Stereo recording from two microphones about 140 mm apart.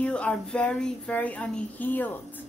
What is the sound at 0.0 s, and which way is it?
Speech, 10° left (ahead or behind).